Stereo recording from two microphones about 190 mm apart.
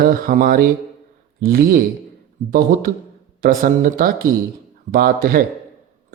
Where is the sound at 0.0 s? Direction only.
50° right (ahead or behind).